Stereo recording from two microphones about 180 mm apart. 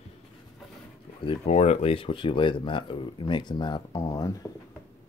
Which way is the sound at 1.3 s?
35° left (ahead or behind).